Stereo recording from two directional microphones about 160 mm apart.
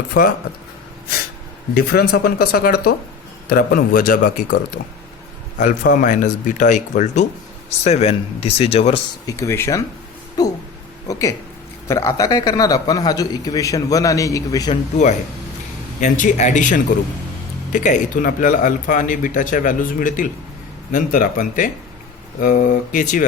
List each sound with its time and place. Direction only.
1.7 s speech: 75° left (ahead or behind); by 9.0 s 40° left (ahead or behind)
9.2 s a man's voice: 20° left (ahead or behind)
14.7 s speech: 45° left (ahead or behind)